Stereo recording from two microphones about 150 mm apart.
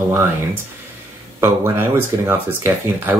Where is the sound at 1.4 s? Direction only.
15° right (ahead or behind).